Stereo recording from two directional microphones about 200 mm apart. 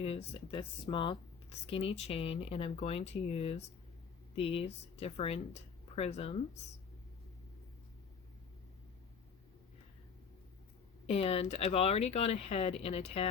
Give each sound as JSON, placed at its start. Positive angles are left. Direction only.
{"t": 0.0, "sound": "speech", "side_deg": 30}
{"t": 11.0, "sound": "speech", "side_deg": 30}